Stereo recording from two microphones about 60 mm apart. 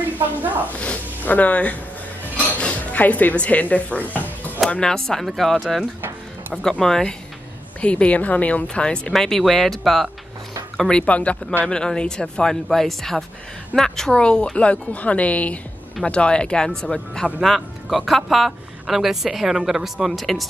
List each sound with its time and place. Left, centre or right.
0.7 s speech: left
2.4 s stir: left
4.6 s a man's voice: centre
7.8 s a man's voice: left; by 10.0 s centre
10.9 s a man's voice: centre
17.4 s speech: centre